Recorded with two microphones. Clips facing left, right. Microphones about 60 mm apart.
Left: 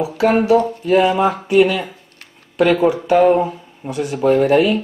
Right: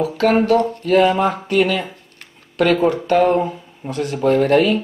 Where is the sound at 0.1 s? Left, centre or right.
Centre.